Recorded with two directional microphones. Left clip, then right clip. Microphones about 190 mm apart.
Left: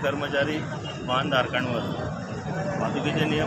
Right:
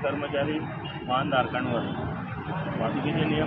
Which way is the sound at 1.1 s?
25° left (ahead or behind).